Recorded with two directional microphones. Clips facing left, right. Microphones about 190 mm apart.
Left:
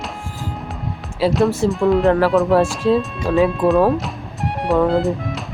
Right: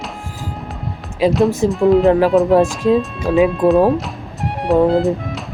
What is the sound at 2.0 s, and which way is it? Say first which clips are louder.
Speech: right 2 dB; 15° right (ahead or behind).